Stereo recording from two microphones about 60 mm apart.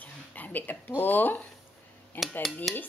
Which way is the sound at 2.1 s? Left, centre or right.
Left.